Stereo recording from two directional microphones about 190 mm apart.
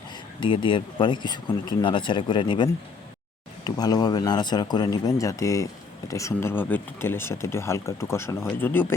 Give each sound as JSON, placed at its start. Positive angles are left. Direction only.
{"t": 0.3, "sound": "speech", "side_deg": 25}